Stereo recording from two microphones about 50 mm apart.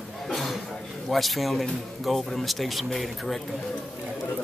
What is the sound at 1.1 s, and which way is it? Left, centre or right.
A man's voice, centre.